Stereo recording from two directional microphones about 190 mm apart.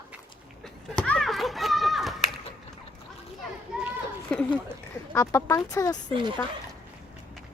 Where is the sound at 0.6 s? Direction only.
5° left (ahead or behind).